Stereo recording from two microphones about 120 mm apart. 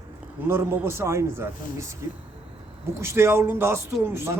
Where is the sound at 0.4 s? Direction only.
20° right (ahead or behind).